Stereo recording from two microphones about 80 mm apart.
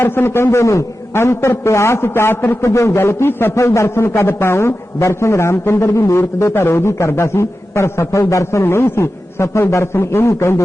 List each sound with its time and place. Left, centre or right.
0.0 s a man's voice: left